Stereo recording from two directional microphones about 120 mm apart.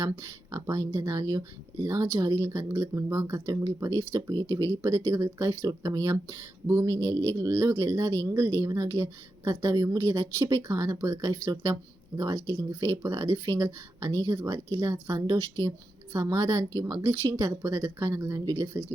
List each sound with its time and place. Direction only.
0.0 s speech: 25° right (ahead or behind)